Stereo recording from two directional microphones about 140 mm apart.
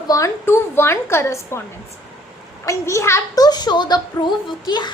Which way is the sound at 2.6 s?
20° left (ahead or behind).